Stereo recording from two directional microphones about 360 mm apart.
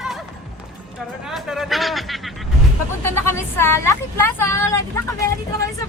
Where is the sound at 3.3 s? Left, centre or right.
Centre.